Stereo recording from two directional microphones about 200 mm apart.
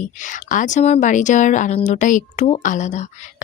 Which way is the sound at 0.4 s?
40° left (ahead or behind).